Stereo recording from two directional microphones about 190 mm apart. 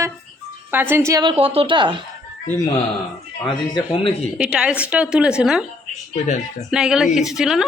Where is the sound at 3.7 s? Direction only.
25° left (ahead or behind).